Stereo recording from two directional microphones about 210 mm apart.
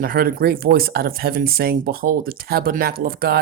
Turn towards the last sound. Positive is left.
turn(degrees=-45)  # may be behind; listen again after turning